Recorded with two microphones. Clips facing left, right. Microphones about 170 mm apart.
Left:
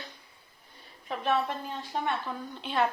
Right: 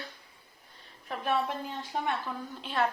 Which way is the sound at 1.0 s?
10° right (ahead or behind).